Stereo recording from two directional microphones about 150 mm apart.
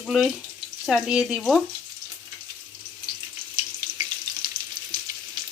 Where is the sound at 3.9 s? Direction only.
65° right (ahead or behind).